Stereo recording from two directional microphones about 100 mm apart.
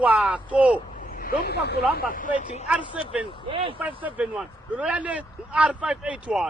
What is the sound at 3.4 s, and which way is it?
Speech, 60° right (ahead or behind).